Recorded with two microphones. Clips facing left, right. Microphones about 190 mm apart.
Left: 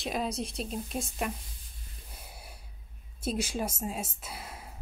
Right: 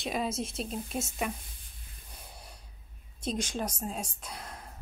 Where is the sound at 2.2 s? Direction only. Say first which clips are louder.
Even; 5° left (ahead or behind).